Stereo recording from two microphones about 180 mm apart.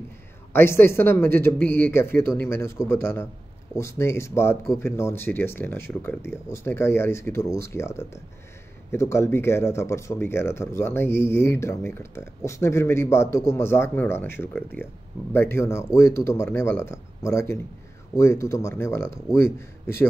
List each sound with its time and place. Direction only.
0.5 s speech: 10° left (ahead or behind)